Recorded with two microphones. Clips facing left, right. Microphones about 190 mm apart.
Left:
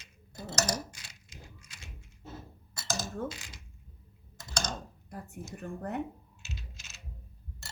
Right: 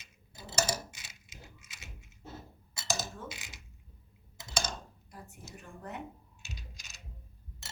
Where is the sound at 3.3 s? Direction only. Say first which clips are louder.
Left 2 dB; 5° right (ahead or behind).